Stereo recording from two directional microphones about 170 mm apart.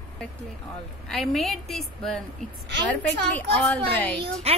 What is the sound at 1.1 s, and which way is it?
A woman's voice, centre (ahead or behind).